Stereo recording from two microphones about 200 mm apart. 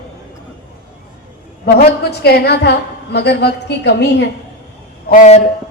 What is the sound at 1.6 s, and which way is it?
A woman's voice, 50° left (ahead or behind).